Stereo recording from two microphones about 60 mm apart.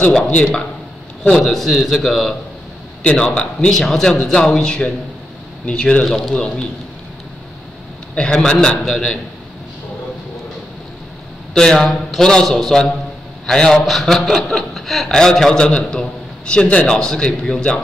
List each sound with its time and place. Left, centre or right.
0.3 s a man's voice: centre
1.3 s a man's voice: centre
6.0 s a man's voice: centre
8.1 s a man's voice: centre
11.5 s a man's voice: centre